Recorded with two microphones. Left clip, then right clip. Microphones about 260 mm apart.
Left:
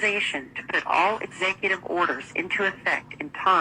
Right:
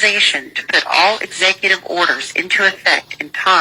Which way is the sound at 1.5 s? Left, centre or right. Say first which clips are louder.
Right 10 dB; right.